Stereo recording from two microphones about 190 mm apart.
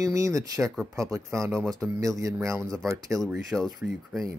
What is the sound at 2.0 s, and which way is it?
Speech, 15° right (ahead or behind).